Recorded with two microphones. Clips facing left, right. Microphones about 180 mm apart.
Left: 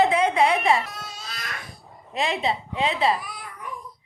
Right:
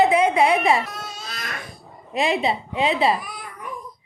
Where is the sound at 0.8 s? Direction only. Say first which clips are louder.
Right 3 dB; 50° right (ahead or behind).